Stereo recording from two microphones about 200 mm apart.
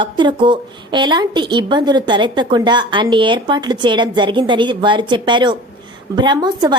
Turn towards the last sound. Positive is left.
turn(degrees=-20)  # may be behind; listen again after turning